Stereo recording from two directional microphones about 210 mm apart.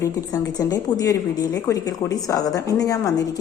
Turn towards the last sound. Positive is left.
turn(degrees=15)  # may be behind; listen again after turning